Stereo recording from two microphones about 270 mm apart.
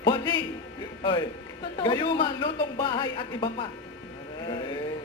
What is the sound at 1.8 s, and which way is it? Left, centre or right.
Speech, centre.